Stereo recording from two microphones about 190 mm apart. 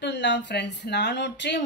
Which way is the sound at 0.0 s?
65° left (ahead or behind).